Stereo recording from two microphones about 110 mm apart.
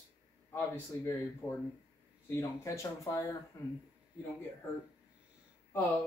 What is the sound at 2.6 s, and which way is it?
Speech, 30° left (ahead or behind).